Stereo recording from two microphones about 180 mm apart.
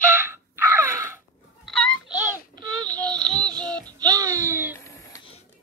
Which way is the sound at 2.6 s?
25° right (ahead or behind).